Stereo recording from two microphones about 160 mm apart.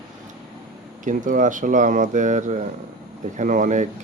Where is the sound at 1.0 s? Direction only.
55° right (ahead or behind).